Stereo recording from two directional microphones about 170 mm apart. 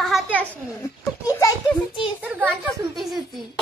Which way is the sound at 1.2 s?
20° left (ahead or behind).